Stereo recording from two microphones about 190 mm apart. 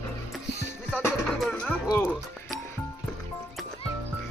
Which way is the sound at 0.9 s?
10° left (ahead or behind).